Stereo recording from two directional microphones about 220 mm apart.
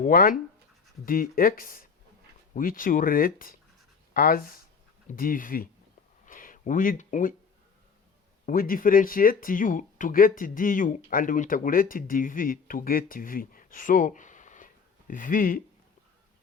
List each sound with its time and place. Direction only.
0.0 s speech: 40° left (ahead or behind)
6.2 s a sound: 40° left (ahead or behind)
8.4 s speech: 40° left (ahead or behind)